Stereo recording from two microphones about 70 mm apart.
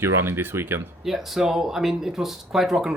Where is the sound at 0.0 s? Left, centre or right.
Right.